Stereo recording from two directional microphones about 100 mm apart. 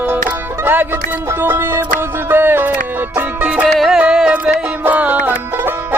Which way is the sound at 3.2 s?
10° right (ahead or behind).